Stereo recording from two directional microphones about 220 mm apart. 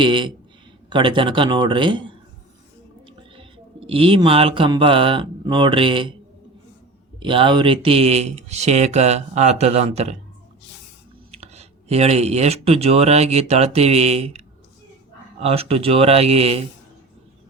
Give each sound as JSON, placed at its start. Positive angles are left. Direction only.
{"t": 0.0, "sound": "speech", "side_deg": -20}
{"t": 3.8, "sound": "speech", "side_deg": -25}
{"t": 7.2, "sound": "speech", "side_deg": -25}
{"t": 11.3, "sound": "speech", "side_deg": -30}